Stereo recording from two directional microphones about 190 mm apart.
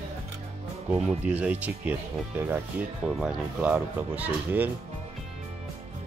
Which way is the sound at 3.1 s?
5° right (ahead or behind).